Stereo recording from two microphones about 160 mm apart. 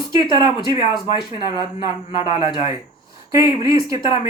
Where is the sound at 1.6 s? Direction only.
30° left (ahead or behind).